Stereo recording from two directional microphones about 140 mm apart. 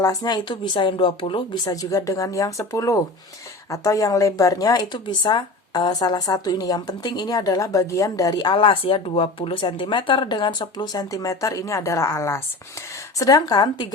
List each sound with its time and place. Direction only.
0.0 s a woman's voice: 25° left (ahead or behind)
1.7 s speech: 25° left (ahead or behind)